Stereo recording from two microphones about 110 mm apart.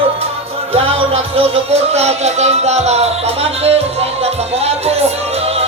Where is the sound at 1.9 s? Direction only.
75° right (ahead or behind).